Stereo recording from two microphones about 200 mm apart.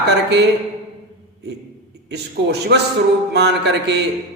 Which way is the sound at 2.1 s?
55° right (ahead or behind).